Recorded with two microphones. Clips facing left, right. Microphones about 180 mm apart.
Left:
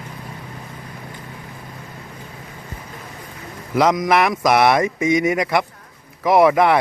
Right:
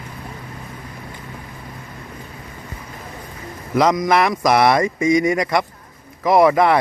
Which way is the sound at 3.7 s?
Centre (ahead or behind).